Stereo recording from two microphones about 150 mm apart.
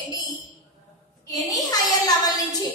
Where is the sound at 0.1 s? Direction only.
25° left (ahead or behind).